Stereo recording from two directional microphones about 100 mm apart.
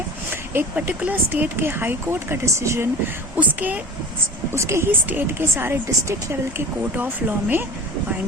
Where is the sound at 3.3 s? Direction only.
15° right (ahead or behind).